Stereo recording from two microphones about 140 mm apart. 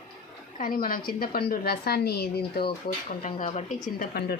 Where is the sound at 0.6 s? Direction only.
90° left.